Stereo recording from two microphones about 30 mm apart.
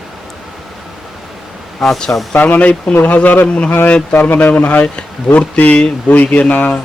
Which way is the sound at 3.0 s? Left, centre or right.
Left.